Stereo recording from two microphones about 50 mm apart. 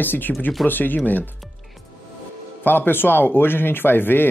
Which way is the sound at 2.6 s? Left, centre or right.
Left.